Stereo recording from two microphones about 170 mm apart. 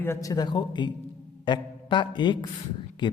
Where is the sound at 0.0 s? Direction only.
15° left (ahead or behind).